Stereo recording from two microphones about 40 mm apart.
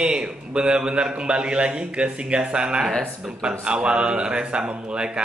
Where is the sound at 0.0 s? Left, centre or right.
Right.